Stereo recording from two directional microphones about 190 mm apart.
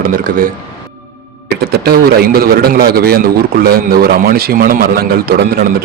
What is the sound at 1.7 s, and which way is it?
A man's voice, 55° right (ahead or behind).